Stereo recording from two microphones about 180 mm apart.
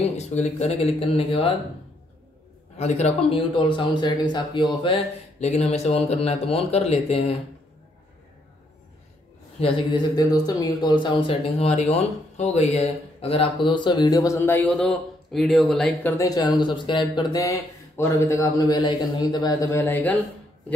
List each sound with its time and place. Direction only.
0.0 s speech: 40° left (ahead or behind)
2.8 s speech: 35° left (ahead or behind)
9.6 s a man's voice: 30° left (ahead or behind); by 20.2 s 10° left (ahead or behind)